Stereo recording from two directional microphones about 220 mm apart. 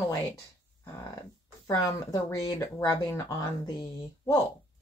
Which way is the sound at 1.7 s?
15° left (ahead or behind).